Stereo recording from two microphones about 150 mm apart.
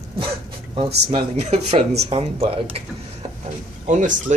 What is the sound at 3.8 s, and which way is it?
Speech, 55° right (ahead or behind).